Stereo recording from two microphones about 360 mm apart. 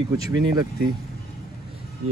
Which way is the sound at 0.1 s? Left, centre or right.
Centre.